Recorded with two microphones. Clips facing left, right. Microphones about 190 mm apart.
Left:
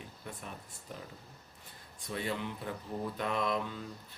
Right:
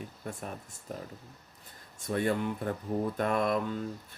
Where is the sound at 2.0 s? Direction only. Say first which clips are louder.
Right 7 dB; 50° right (ahead or behind).